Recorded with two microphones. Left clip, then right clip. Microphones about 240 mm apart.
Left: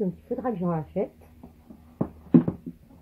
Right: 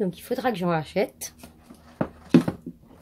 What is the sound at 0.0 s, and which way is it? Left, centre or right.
Speech, right.